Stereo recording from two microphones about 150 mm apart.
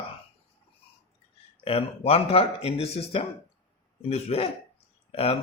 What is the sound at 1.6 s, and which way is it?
Speech, 40° left (ahead or behind).